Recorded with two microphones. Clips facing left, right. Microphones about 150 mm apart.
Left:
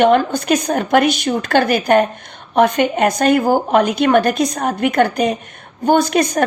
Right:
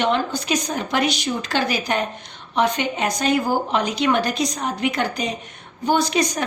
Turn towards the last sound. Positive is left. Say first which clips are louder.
# left 6 dB
turn(degrees=55)  # may be behind; listen again after turning